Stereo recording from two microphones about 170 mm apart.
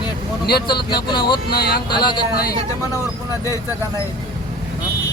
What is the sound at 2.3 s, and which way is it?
Speech, 65° left (ahead or behind).